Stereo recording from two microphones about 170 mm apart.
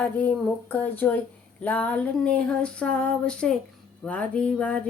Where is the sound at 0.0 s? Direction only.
10° left (ahead or behind).